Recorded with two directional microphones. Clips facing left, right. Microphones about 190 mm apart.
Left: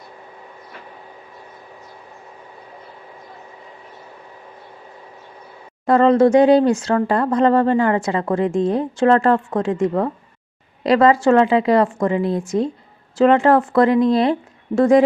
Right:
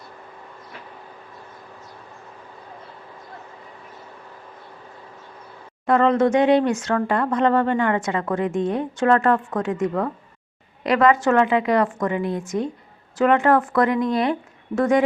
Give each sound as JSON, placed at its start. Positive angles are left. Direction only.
{"t": 5.8, "sound": "speech", "side_deg": 35}